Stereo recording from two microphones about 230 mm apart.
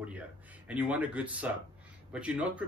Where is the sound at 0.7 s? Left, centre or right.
Centre.